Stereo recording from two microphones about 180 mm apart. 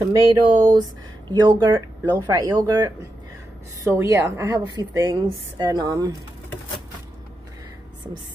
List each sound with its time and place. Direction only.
0.0 s a woman's voice: 20° right (ahead or behind)